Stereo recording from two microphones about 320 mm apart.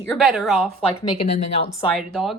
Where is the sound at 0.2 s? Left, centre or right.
Centre.